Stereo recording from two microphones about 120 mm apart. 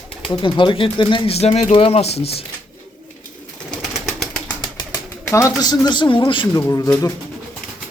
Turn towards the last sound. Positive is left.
turn(degrees=30)  # may be behind; listen again after turning